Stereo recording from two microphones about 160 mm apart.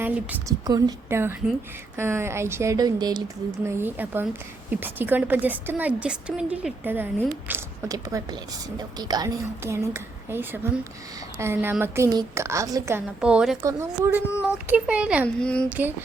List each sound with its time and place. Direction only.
0.0 s a woman's voice: 10° right (ahead or behind)
13.2 s a woman's voice: 5° right (ahead or behind)
13.6 s a woman's voice: 15° right (ahead or behind)
14.7 s a woman's voice: 5° right (ahead or behind)
15.4 s a woman's voice: 5° left (ahead or behind)
15.7 s a woman's voice: 10° right (ahead or behind)